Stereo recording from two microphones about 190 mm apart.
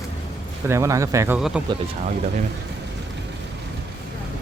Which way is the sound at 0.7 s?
15° right (ahead or behind).